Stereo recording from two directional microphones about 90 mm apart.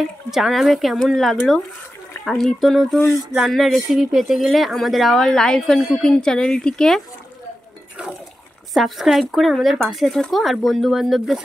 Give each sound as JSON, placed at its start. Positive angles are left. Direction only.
{"t": 0.3, "sound": "speech", "side_deg": 0}
{"t": 8.7, "sound": "speech", "side_deg": 0}